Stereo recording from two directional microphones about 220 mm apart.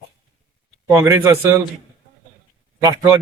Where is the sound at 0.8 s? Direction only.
15° right (ahead or behind).